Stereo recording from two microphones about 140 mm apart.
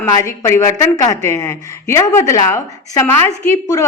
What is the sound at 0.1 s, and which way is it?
Speech, 20° left (ahead or behind).